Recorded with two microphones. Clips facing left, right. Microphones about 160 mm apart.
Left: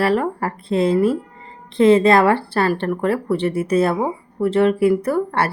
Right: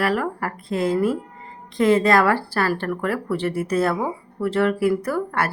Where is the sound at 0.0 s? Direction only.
30° left (ahead or behind).